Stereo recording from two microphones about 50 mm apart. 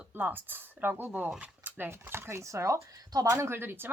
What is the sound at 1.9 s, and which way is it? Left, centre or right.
Speech, right.